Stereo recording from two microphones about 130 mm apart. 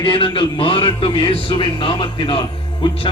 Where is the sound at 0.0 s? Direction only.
40° left (ahead or behind).